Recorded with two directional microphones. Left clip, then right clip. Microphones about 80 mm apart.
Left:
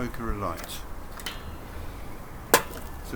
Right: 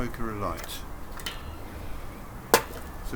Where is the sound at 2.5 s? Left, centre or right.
Left.